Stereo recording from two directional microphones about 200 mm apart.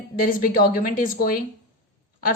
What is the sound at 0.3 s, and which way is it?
A woman's voice, 45° left (ahead or behind).